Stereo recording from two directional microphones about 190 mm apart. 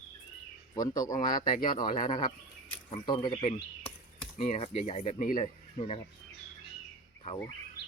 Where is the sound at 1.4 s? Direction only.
40° left (ahead or behind).